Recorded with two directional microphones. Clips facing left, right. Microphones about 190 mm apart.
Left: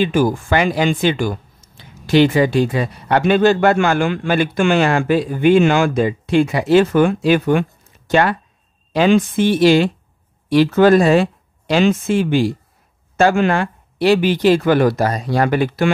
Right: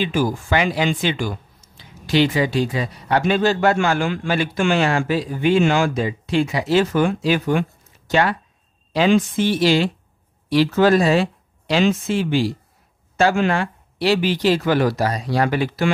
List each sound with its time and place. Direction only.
0.0 s speech: 55° left (ahead or behind)